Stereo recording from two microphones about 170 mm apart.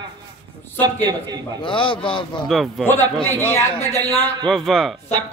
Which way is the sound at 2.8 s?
10° left (ahead or behind).